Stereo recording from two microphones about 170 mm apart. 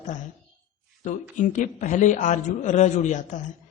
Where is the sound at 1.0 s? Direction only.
45° left (ahead or behind).